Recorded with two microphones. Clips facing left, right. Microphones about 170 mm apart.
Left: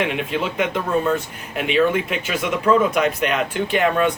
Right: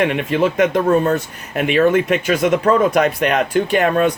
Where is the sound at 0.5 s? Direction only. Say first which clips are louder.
Right 5 dB; 40° right (ahead or behind).